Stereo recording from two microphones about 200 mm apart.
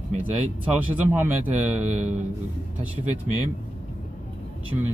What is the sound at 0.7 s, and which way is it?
Speech, 10° right (ahead or behind).